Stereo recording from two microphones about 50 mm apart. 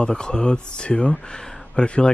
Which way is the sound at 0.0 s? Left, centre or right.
Centre.